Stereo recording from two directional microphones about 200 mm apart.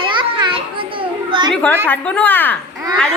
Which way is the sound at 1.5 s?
10° left (ahead or behind).